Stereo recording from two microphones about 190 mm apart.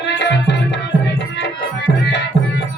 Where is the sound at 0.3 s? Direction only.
65° left (ahead or behind).